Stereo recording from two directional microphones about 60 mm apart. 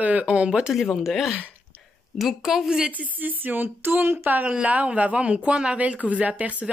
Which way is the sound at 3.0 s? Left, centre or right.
Right.